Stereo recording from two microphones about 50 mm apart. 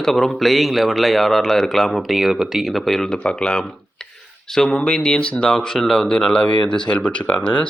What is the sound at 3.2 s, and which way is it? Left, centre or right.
Speech, centre.